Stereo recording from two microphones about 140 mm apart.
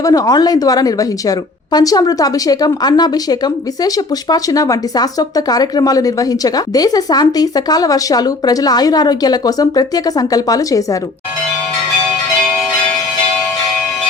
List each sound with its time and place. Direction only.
0.0 s a woman's voice: 25° left (ahead or behind)